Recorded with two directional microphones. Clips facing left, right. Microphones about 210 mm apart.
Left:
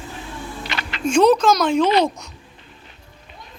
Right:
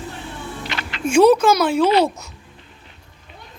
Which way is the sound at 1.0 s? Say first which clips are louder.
Right 2 dB; 5° right (ahead or behind).